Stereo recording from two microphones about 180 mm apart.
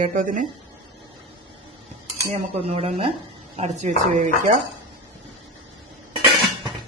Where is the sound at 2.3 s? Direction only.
35° right (ahead or behind).